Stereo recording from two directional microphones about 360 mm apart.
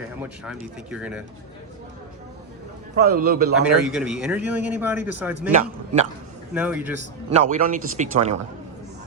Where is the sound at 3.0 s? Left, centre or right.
Right.